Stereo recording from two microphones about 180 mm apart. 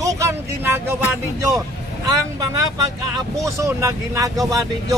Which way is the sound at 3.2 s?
15° right (ahead or behind).